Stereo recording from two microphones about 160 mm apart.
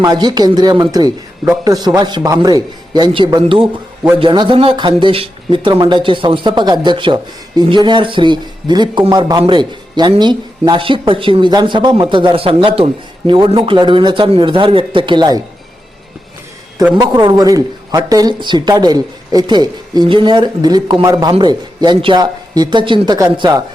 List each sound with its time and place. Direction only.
0.0 s a woman's voice: 25° right (ahead or behind)
17.0 s a woman's voice: 25° right (ahead or behind)